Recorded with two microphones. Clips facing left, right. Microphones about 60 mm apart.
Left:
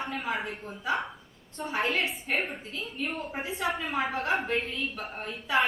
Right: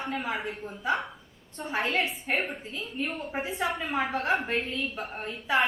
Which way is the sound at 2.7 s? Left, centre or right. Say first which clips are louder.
Right 1 dB; centre.